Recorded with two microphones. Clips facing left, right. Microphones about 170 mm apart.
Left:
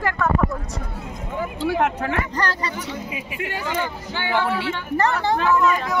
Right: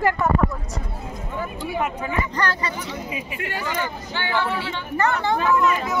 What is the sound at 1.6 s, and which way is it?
Speech, 85° left.